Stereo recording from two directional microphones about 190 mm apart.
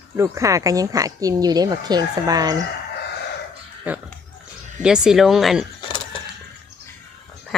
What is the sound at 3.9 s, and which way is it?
Speech, 10° right (ahead or behind).